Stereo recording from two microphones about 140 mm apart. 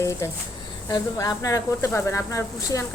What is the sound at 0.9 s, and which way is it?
Speech, 25° left (ahead or behind).